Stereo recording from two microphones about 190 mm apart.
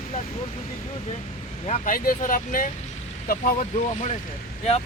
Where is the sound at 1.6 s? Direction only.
40° left (ahead or behind).